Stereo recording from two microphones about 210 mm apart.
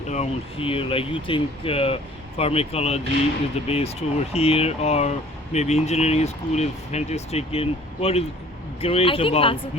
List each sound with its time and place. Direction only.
0.1 s speech: 30° left (ahead or behind)